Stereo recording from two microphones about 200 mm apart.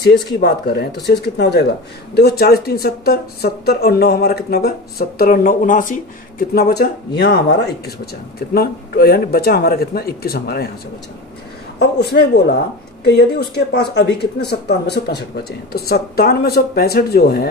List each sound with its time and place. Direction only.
0.2 s speech: 55° left (ahead or behind)
11.8 s speech: 55° left (ahead or behind)